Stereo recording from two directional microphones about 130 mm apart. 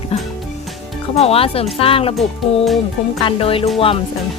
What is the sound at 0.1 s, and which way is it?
Music, 55° left (ahead or behind).